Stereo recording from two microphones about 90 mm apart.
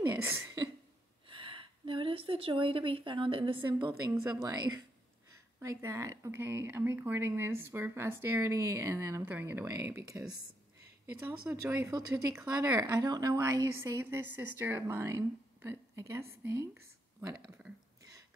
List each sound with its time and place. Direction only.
0.2 s speech: 25° right (ahead or behind)
1.3 s a woman's voice: 70° right (ahead or behind)
4.4 s a woman's voice: 45° right (ahead or behind)
5.6 s speech: 30° right (ahead or behind)
12.4 s a woman's voice: 45° right (ahead or behind)
13.4 s speech: 35° right (ahead or behind)